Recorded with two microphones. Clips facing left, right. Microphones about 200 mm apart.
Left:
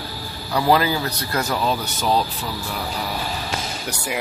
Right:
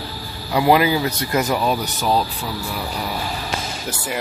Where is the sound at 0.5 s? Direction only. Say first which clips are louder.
Right 3 dB; 15° right (ahead or behind).